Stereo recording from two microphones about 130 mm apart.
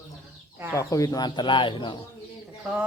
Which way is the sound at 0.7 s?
25° left (ahead or behind).